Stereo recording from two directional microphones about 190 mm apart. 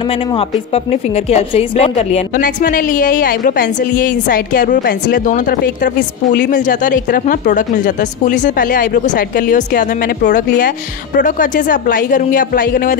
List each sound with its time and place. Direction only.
1.1 s a woman's voice: 30° left (ahead or behind)